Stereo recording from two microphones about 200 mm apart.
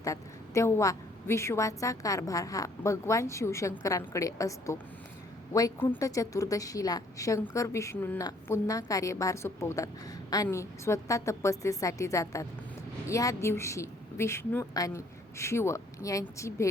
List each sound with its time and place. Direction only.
0.0 s a woman's voice: 15° left (ahead or behind)